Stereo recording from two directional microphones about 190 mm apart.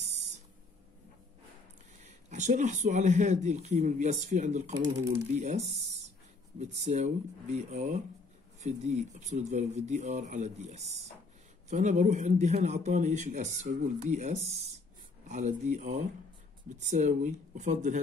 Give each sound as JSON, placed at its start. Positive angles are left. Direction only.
{"t": 0.0, "sound": "a sound", "side_deg": -35}
{"t": 2.0, "sound": "speech", "side_deg": -40}
{"t": 6.6, "sound": "speech", "side_deg": -35}